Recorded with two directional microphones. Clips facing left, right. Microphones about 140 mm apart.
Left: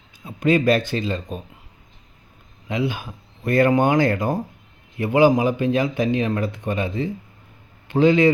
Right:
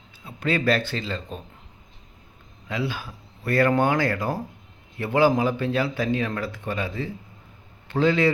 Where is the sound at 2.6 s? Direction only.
20° left (ahead or behind).